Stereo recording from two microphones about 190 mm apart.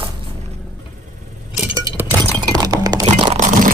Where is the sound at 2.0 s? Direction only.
20° right (ahead or behind).